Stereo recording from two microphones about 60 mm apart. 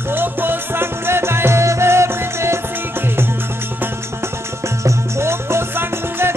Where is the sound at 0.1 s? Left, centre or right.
Right.